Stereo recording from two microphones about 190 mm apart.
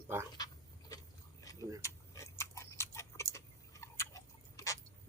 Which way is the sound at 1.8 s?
15° left (ahead or behind).